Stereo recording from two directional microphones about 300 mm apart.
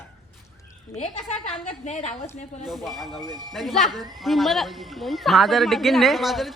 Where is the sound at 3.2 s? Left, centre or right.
Centre.